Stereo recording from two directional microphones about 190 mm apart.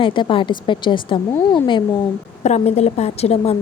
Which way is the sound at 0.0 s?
25° left (ahead or behind).